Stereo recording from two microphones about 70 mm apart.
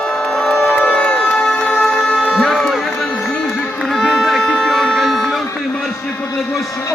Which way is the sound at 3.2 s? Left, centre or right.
Centre.